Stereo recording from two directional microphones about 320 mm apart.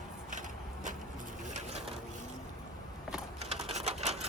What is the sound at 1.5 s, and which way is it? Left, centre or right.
Pigeon, centre.